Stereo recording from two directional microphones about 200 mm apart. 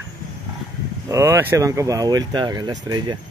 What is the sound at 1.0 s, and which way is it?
Speech, 15° right (ahead or behind).